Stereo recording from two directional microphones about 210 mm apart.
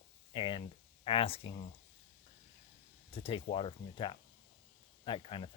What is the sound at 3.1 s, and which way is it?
Speech, 25° left (ahead or behind).